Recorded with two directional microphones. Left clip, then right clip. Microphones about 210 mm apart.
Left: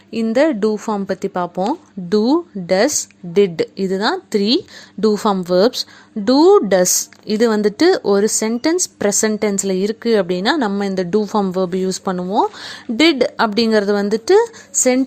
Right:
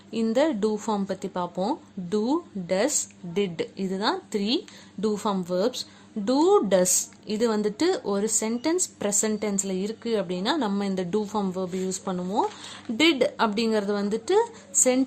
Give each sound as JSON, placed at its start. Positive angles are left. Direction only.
{"t": 0.3, "sound": "a woman's voice", "side_deg": 25}